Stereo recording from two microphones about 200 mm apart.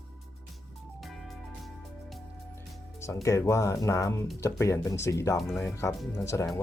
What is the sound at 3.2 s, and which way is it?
Speech, 15° left (ahead or behind).